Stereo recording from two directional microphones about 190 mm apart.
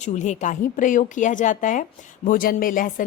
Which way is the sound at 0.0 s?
40° left (ahead or behind).